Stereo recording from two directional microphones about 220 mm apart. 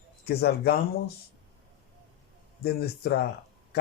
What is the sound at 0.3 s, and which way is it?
Speech, 45° left (ahead or behind).